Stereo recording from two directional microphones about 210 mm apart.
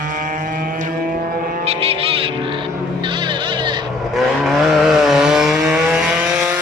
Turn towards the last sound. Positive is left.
turn(degrees=-5)  # may be behind; listen again after turning